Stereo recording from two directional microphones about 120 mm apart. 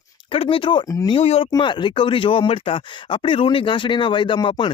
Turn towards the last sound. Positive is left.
turn(degrees=45)  # may be behind; listen again after turning